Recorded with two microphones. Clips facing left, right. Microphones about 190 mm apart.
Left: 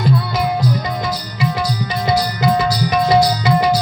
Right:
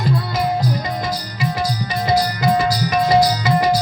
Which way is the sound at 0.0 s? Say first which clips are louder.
Left 2 dB; 45° right (ahead or behind).